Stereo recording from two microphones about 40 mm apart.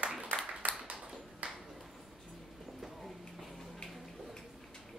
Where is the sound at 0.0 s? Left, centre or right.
Right.